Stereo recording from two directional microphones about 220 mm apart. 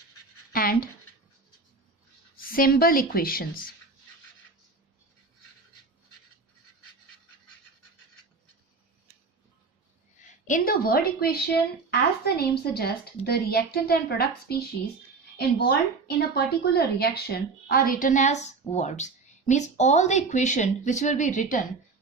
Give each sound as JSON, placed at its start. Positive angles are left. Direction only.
{"t": 0.5, "sound": "a woman's voice", "side_deg": 40}
{"t": 2.3, "sound": "a woman's voice", "side_deg": 40}
{"t": 10.4, "sound": "a woman's voice", "side_deg": 40}
{"t": 15.6, "sound": "a woman's voice", "side_deg": 45}